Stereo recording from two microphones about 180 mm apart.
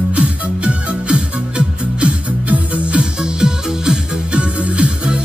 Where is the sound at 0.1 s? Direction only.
5° right (ahead or behind).